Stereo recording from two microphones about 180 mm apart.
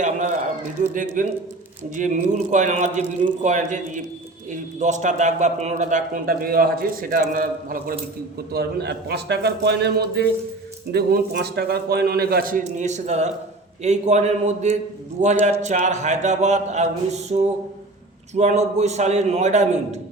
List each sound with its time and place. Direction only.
0.0 s a sound: 40° right (ahead or behind)
0.9 s a man's voice: 45° right (ahead or behind)
8.5 s a man's voice: 65° right (ahead or behind); by 20.0 s 40° right (ahead or behind)